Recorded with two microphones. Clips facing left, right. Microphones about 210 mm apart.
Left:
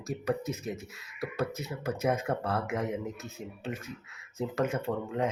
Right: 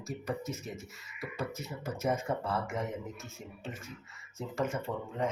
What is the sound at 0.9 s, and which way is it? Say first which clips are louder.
Speech: left 6 dB; 70° left (ahead or behind).